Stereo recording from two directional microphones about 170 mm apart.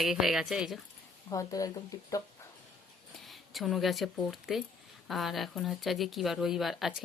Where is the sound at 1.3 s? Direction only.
20° left (ahead or behind).